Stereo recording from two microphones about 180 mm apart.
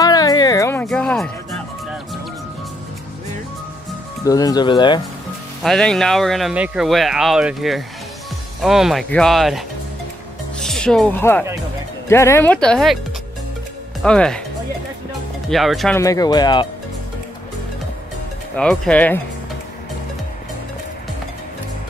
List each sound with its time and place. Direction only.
0.0 s a sound: 20° left (ahead or behind)
0.8 s music: 5° left (ahead or behind)
4.2 s speech: 20° left (ahead or behind)
5.6 s speech: 5° left (ahead or behind)
14.0 s speech: 5° left (ahead or behind)
15.5 s speech: centre (ahead or behind)
16.0 s speech: 20° left (ahead or behind)
18.6 s speech: 5° left (ahead or behind)